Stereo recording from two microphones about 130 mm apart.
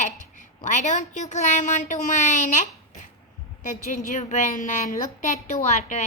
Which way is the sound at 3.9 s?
65° left (ahead or behind).